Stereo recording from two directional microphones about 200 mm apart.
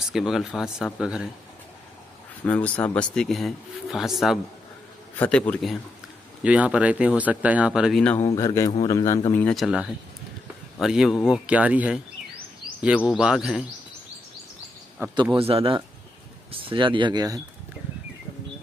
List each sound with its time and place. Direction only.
0.1 s speech: centre (ahead or behind)
2.4 s speech: 5° left (ahead or behind)
15.0 s a man's voice: 15° right (ahead or behind)
15.3 s speech: 30° right (ahead or behind)